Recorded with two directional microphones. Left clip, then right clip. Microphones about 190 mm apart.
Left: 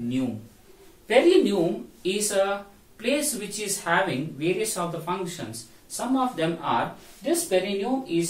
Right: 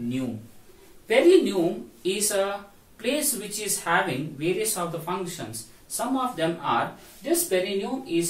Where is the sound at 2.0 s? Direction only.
15° left (ahead or behind).